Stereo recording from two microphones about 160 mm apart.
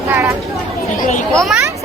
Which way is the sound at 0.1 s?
15° right (ahead or behind).